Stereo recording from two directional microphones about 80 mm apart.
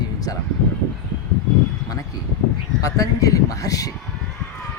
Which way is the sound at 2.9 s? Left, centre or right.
Left.